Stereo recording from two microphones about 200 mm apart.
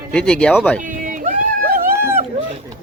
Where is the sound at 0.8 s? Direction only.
40° right (ahead or behind).